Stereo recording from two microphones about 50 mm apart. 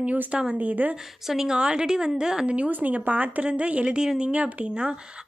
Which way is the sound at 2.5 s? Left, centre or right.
Right.